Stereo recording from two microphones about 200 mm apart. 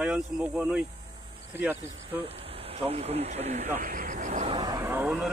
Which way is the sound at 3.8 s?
40° right (ahead or behind).